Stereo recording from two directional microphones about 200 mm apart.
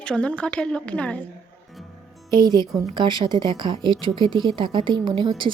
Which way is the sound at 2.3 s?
20° right (ahead or behind).